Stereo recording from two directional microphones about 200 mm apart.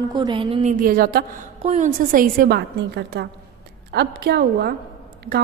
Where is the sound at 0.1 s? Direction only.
25° right (ahead or behind); by 1.4 s 45° right (ahead or behind).